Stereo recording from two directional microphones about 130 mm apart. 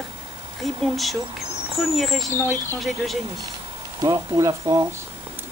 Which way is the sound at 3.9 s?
30° right (ahead or behind).